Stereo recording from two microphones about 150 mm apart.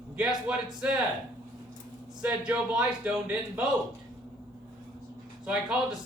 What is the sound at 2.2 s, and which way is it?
Speech, 10° right (ahead or behind).